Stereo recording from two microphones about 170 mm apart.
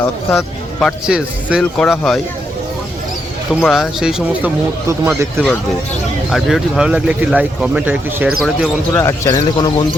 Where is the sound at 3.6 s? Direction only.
Centre (ahead or behind).